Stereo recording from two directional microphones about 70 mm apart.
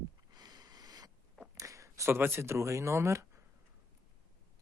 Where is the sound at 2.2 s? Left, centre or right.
Right.